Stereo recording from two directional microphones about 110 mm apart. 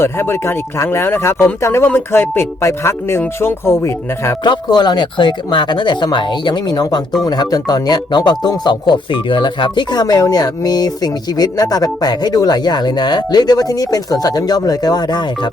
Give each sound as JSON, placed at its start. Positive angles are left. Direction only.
{"t": 0.0, "sound": "speech", "side_deg": 20}
{"t": 4.4, "sound": "speech", "side_deg": 40}